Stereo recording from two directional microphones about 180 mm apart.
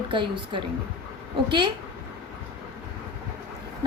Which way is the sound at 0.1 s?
25° right (ahead or behind).